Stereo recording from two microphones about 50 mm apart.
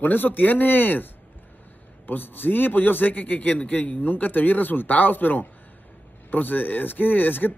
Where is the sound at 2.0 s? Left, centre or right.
Left.